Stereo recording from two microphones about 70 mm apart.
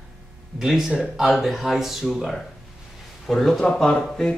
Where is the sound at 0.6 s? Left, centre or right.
Centre.